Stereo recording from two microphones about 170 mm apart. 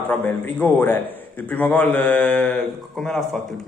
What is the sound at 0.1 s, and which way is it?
A man's voice, 10° left (ahead or behind).